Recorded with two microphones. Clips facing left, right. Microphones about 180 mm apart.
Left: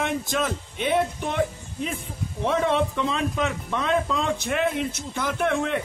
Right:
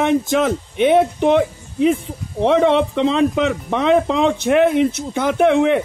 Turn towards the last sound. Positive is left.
turn(degrees=-70)  # may be behind; listen again after turning